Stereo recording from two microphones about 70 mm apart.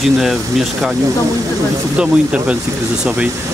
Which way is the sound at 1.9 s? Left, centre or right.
Centre.